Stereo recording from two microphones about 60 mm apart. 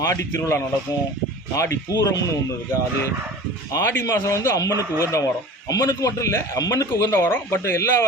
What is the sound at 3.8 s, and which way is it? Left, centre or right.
A man's voice, left.